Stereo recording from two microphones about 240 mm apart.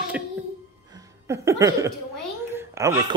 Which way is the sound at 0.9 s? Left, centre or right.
Centre.